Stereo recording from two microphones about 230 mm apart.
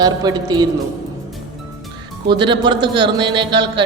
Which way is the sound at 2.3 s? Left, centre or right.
Right.